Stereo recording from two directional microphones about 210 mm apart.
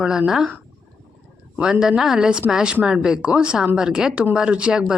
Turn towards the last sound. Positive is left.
turn(degrees=-5)  # may be behind; listen again after turning